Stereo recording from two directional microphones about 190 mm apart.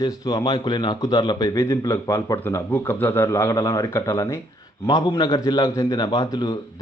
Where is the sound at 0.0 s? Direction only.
20° left (ahead or behind).